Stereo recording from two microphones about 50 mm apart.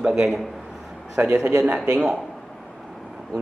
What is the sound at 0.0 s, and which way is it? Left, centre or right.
Speech, right.